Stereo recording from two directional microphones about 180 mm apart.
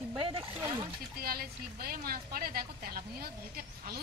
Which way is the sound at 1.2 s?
55° right (ahead or behind).